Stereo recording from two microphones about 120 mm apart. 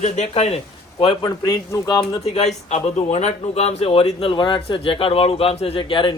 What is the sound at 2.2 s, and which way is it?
Speech, 60° left (ahead or behind).